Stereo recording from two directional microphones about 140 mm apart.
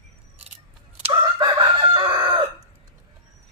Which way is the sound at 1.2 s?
30° right (ahead or behind).